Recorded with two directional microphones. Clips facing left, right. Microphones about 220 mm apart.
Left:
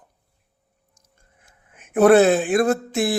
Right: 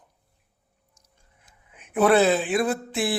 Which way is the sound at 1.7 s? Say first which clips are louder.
Left 6 dB; 45° left (ahead or behind).